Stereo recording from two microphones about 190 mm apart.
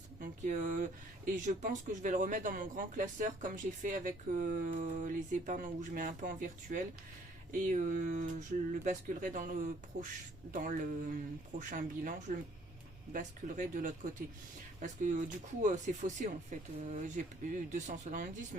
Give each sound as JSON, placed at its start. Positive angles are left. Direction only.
{"t": 0.2, "sound": "speech", "side_deg": -45}